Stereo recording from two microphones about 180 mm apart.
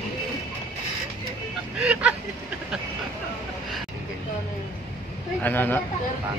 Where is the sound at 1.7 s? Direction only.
5° right (ahead or behind).